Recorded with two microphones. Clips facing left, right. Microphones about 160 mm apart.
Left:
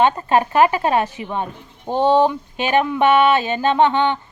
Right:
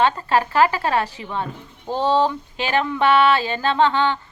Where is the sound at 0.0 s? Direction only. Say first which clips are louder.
Left 3 dB; 20° left (ahead or behind).